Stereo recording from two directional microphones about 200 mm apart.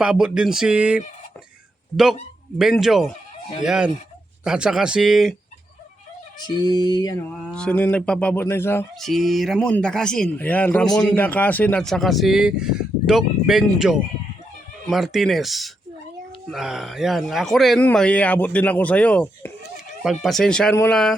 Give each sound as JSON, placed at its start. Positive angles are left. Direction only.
{"t": 0.0, "sound": "speech", "side_deg": -5}
{"t": 2.6, "sound": "speech", "side_deg": 0}
{"t": 6.6, "sound": "speech", "side_deg": 20}
{"t": 7.5, "sound": "speech", "side_deg": 5}
{"t": 9.0, "sound": "speech", "side_deg": 0}